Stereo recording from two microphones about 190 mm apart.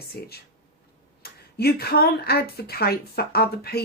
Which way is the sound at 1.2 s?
55° left (ahead or behind).